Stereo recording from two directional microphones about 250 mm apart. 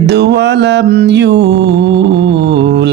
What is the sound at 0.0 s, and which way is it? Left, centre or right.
Speech, right.